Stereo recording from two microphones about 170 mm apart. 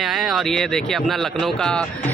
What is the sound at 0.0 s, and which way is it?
A man's voice, centre (ahead or behind).